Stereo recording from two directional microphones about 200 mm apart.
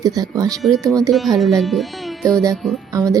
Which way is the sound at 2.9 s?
15° right (ahead or behind).